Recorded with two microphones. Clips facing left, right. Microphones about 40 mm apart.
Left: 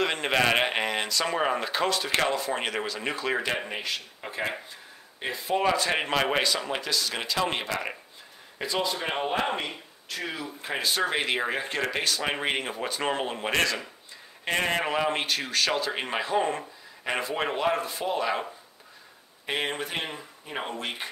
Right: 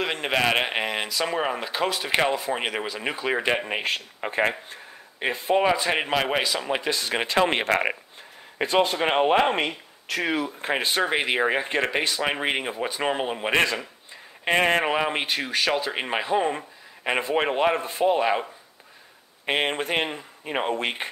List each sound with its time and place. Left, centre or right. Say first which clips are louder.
0.0 s speech: right 1 dB; centre; by 3.8 s right
3.8 s speech: right 6 dB; right
5.2 s speech: right 4 dB; right; by 6.8 s centre
6.8 s speech: right 4 dB; right
10.6 s speech: right 4 dB; right
11.0 s speech: right 3 dB; centre
15.0 s speech: right 2 dB; centre
19.4 s speech: right 5 dB; right